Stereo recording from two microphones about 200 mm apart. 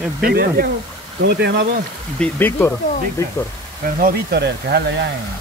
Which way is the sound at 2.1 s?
10° left (ahead or behind).